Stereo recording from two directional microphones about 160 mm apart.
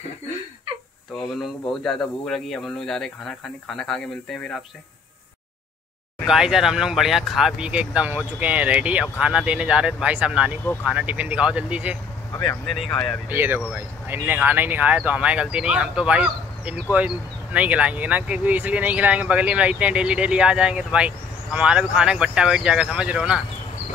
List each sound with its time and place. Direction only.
1.4 s speech: centre (ahead or behind)
6.2 s speech: 5° right (ahead or behind)
13.3 s speech: 15° right (ahead or behind)